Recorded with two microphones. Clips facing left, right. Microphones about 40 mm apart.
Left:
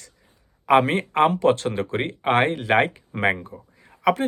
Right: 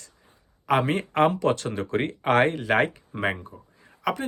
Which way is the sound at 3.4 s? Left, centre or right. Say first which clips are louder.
Left 4 dB; left.